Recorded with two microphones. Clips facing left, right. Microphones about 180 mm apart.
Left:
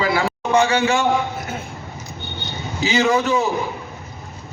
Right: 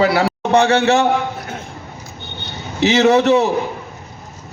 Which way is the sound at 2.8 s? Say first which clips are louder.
Right 6 dB; 65° right (ahead or behind).